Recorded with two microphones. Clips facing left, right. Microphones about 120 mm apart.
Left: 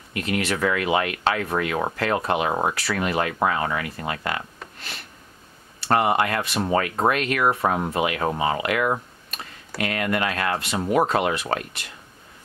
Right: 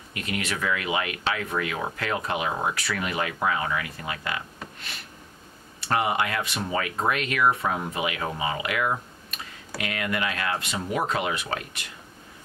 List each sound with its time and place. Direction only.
0.3 s speech: 70° left (ahead or behind)
0.6 s speech: 45° left (ahead or behind)
5.9 s speech: 50° left (ahead or behind)